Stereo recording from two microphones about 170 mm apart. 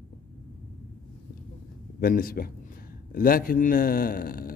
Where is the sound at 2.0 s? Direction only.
60° left (ahead or behind).